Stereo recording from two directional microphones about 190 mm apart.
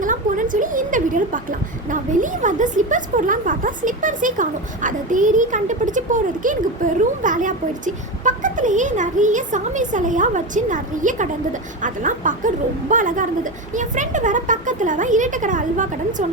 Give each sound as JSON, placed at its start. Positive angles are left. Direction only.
{"t": 0.0, "sound": "a woman's voice", "side_deg": -45}